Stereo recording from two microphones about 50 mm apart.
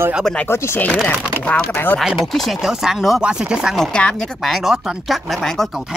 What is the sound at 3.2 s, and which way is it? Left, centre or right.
Speech, centre.